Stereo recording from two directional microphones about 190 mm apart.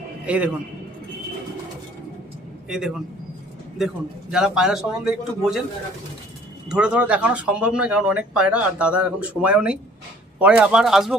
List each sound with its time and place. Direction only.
0.3 s a man's voice: 5° right (ahead or behind)
2.6 s speech: centre (ahead or behind)
6.7 s speech: 5° right (ahead or behind)